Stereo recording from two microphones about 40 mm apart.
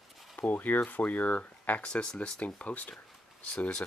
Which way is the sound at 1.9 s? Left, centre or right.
Left.